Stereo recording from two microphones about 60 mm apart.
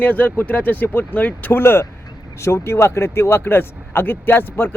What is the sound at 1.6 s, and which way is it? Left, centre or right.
Speech, left.